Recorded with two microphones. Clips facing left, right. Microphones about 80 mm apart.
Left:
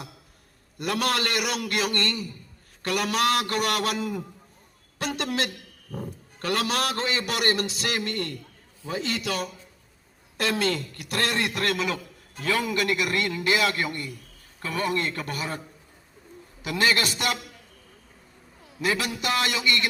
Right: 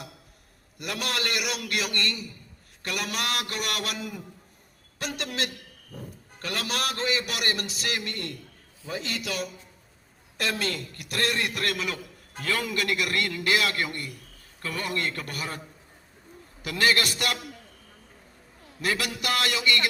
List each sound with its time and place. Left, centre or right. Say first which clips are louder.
0.8 s a man's voice: left 5 dB; left
12.4 s a man's voice: left 3 dB; left
16.6 s a man's voice: left 1 dB; left
18.9 s a man's voice: left 2 dB; left